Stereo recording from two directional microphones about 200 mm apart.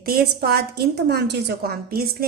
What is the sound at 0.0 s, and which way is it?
Speech, 50° right (ahead or behind).